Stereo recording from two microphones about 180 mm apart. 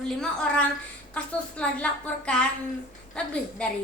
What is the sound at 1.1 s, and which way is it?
A woman's voice, 5° left (ahead or behind).